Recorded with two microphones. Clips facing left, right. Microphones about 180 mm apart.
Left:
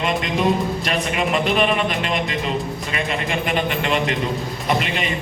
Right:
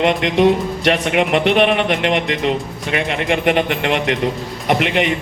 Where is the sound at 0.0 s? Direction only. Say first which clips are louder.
Right 7 dB; 80° right.